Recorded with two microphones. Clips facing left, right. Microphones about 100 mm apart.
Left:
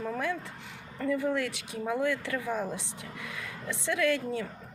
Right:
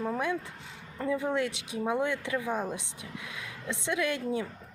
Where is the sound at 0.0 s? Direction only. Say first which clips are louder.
Right 2 dB; 15° right (ahead or behind).